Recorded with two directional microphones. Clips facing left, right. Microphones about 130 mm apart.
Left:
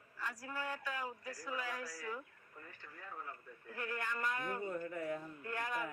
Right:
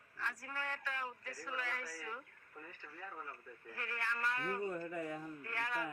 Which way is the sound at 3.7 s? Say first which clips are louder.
Left 2 dB; 15° left (ahead or behind).